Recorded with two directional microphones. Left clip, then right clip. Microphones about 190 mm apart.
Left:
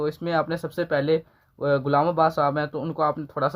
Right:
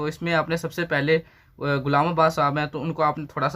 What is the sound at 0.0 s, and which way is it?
Speech, 35° left (ahead or behind).